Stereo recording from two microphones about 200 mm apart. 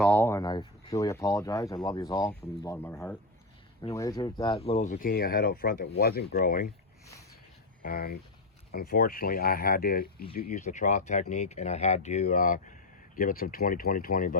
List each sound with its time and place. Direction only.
0.0 s a sound: 10° left (ahead or behind)
1.7 s speech: 15° left (ahead or behind); by 6.7 s 45° left (ahead or behind)
7.8 s speech: 45° left (ahead or behind)